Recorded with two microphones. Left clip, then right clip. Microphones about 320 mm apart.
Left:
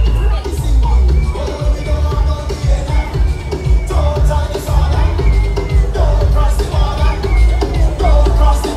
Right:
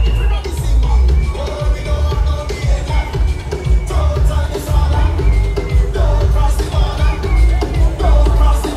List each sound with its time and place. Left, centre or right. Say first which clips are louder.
8.0 s music: left 3 dB; left